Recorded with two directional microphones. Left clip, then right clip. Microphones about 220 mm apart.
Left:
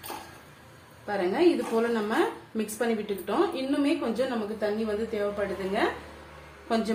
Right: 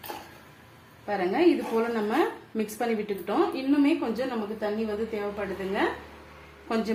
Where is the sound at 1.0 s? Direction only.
25° right (ahead or behind).